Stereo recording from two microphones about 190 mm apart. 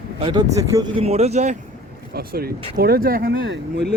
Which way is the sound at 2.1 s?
55° right (ahead or behind).